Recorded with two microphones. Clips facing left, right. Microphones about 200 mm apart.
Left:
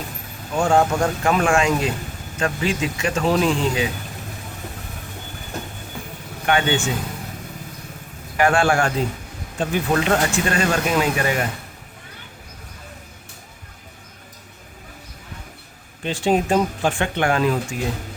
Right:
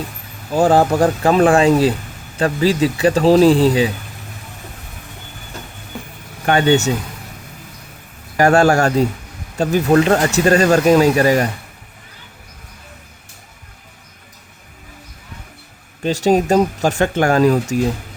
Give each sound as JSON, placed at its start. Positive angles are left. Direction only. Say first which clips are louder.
{"t": 0.5, "sound": "speech", "louder": "right 5 dB", "side_deg": -35}
{"t": 6.4, "sound": "speech", "louder": "right 6 dB", "side_deg": -40}
{"t": 8.4, "sound": "speech", "louder": "right 5 dB", "side_deg": -40}
{"t": 16.0, "sound": "speech", "louder": "right 5 dB", "side_deg": -40}